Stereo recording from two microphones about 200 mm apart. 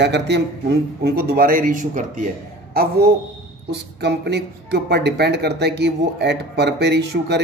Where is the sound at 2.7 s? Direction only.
50° right (ahead or behind).